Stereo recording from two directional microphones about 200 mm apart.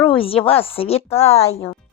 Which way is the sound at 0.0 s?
25° left (ahead or behind).